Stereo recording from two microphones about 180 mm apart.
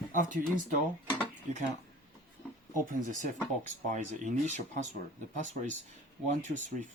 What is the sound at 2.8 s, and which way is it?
Speech, 45° right (ahead or behind).